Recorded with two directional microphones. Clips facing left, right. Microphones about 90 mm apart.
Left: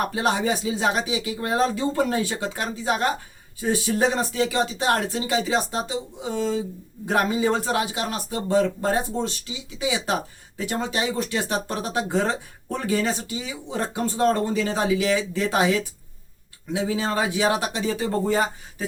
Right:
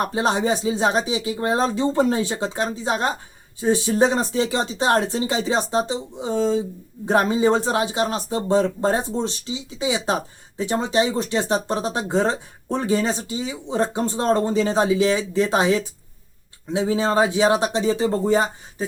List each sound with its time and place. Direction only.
0.0 s speech: 25° right (ahead or behind)